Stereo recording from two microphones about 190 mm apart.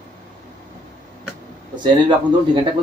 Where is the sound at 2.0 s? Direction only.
25° right (ahead or behind).